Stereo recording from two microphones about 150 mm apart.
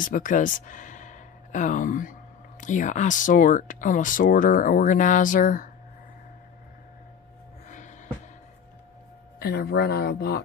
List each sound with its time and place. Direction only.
0.0 s speech: 60° left (ahead or behind)
7.6 s a sound: 55° left (ahead or behind)
9.4 s speech: 90° left